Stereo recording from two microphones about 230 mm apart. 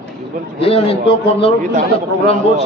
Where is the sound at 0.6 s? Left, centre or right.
Left.